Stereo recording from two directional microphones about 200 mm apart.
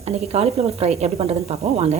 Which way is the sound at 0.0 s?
30° right (ahead or behind).